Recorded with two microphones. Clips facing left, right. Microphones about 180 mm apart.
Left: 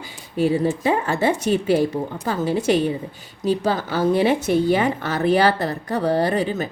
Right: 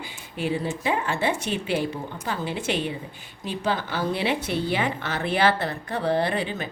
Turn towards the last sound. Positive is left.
turn(degrees=40)  # may be behind; listen again after turning